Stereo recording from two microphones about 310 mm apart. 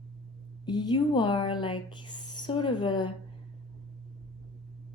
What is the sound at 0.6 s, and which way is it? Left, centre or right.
A woman's voice, centre.